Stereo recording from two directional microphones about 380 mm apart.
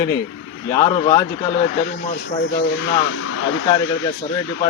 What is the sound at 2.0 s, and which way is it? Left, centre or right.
Speech, left.